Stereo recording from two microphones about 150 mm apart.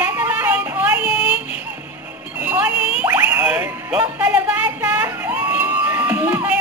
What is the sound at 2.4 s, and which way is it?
Music, 10° right (ahead or behind).